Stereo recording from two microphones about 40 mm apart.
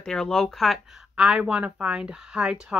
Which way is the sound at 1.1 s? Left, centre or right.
Right.